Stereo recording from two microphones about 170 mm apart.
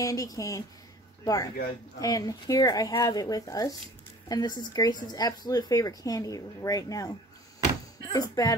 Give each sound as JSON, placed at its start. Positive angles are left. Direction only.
{"t": 0.0, "sound": "speech", "side_deg": 20}
{"t": 8.1, "sound": "speech", "side_deg": 20}